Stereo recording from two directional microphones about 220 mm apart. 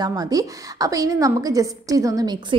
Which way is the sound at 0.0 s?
15° right (ahead or behind).